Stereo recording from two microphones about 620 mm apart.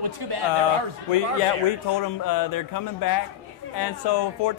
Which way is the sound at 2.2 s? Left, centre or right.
Left.